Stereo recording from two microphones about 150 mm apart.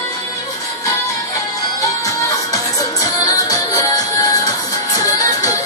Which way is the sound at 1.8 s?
25° left (ahead or behind).